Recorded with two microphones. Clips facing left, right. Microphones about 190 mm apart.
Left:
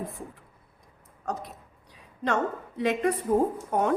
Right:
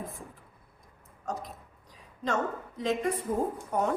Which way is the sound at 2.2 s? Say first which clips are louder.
Left 3 dB; 65° left (ahead or behind).